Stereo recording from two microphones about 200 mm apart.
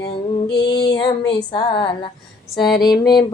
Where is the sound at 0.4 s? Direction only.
55° left (ahead or behind).